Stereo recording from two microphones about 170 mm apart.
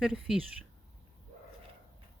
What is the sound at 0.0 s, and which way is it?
Speech, 5° right (ahead or behind).